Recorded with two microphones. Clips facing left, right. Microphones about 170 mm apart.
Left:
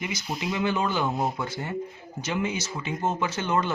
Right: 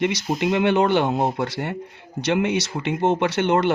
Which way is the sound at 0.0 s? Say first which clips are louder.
Right 9 dB; 75° right (ahead or behind).